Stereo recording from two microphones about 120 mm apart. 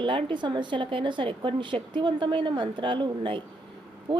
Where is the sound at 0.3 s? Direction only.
40° right (ahead or behind).